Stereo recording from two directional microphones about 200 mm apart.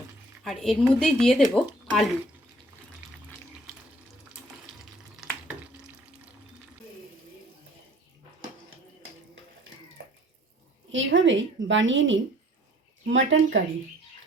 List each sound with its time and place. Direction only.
0.4 s a woman's voice: centre (ahead or behind)
5.1 s stir: centre (ahead or behind)
10.9 s a woman's voice: 75° right (ahead or behind)